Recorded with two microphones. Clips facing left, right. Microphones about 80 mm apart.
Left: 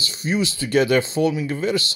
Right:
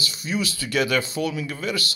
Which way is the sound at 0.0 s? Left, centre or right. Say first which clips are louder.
Left 4 dB; left.